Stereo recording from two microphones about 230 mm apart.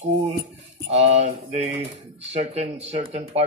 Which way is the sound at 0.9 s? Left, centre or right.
Right.